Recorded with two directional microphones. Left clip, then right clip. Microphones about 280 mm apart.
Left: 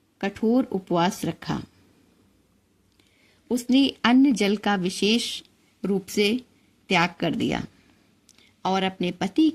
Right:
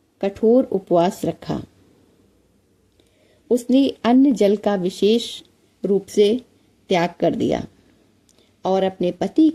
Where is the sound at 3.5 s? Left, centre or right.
Centre.